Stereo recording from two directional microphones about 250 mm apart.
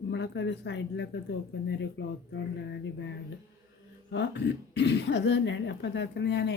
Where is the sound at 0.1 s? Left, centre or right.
Left.